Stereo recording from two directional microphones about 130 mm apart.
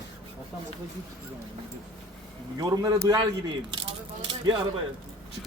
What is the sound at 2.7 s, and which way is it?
Speech, 25° right (ahead or behind).